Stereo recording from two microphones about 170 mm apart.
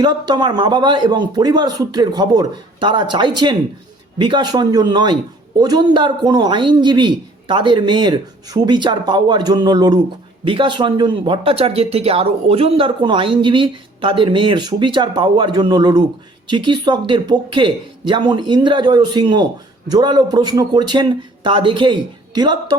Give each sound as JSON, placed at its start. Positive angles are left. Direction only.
{"t": 0.0, "sound": "speech", "side_deg": -25}